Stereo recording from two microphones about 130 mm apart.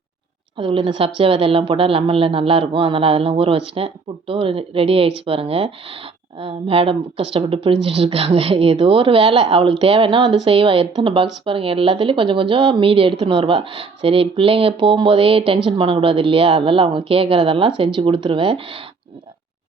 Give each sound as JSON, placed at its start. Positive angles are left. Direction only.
{"t": 0.5, "sound": "speech", "side_deg": -40}